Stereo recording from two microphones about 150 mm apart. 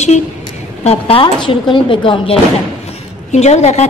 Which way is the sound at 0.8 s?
40° left (ahead or behind).